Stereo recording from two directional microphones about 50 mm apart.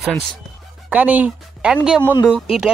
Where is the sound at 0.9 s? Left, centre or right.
Right.